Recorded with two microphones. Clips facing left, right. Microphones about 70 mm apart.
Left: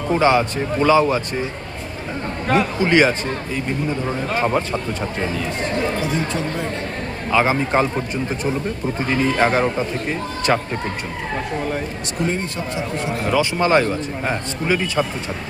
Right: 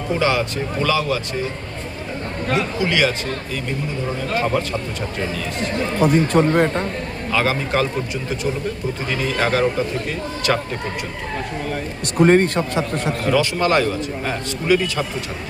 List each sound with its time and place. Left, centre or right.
0.1 s a man's voice: left
2.8 s speech: left
4.4 s a man's voice: left
6.0 s speech: right
7.3 s a man's voice: left
9.0 s a man's voice: left
12.2 s a man's voice: right
13.3 s a man's voice: left